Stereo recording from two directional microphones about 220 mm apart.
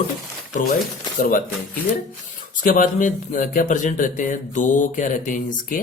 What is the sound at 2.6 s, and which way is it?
Speech, 35° left (ahead or behind).